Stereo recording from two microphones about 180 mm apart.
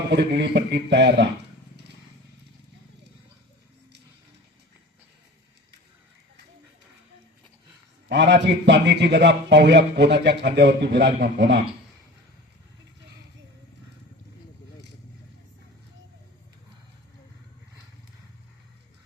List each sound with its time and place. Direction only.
0.1 s a man's voice: 70° right (ahead or behind)
8.1 s a man's voice: 75° right (ahead or behind)